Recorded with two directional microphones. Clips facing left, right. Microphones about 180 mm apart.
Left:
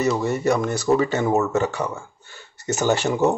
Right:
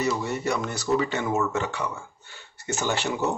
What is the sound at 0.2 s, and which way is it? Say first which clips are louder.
Speech: left 6 dB; 45° left (ahead or behind).